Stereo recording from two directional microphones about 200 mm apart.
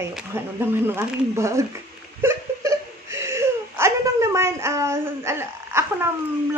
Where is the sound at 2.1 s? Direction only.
15° right (ahead or behind).